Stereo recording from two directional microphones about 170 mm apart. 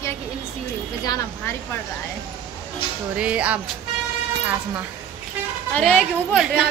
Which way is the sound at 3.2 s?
5° right (ahead or behind).